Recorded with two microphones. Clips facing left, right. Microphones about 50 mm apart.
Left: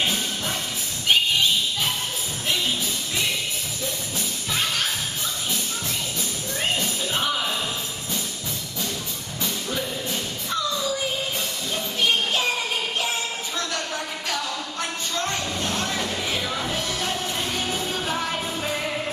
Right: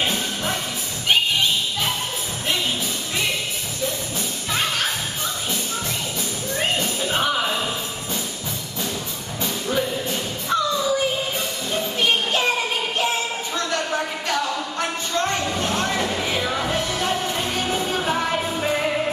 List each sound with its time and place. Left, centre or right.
0.0 s music: centre
4.5 s music: centre
6.7 s music: centre
9.4 s music: centre
13.6 s a sound: centre